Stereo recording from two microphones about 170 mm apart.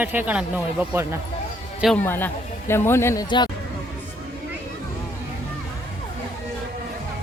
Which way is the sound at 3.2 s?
25° left (ahead or behind).